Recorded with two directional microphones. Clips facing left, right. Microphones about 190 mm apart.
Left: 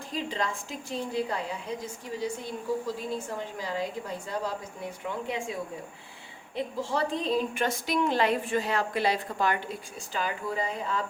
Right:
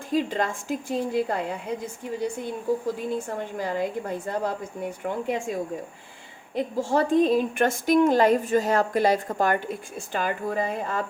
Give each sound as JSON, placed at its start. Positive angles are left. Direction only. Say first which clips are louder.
{"t": 0.1, "sound": "a woman's voice", "louder": "right 7 dB", "side_deg": -50}
{"t": 3.6, "sound": "a woman's voice", "louder": "right 7 dB", "side_deg": -55}
{"t": 6.6, "sound": "a woman's voice", "louder": "right 6 dB", "side_deg": -45}